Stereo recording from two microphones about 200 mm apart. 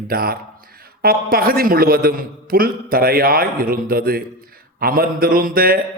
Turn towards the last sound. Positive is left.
turn(degrees=-45)  # may be behind; listen again after turning